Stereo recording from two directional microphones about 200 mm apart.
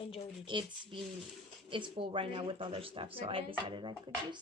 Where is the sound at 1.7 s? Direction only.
25° right (ahead or behind).